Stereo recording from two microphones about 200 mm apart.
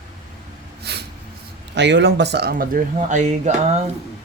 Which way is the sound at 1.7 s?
60° right (ahead or behind).